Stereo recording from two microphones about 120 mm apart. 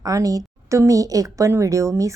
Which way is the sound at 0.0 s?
30° right (ahead or behind).